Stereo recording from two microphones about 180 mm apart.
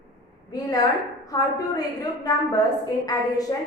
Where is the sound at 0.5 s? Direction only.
20° left (ahead or behind).